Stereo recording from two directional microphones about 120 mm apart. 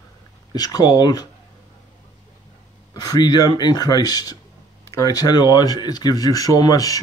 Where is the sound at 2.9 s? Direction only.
35° left (ahead or behind).